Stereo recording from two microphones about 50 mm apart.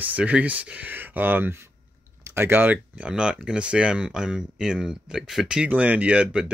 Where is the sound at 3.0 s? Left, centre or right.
Centre.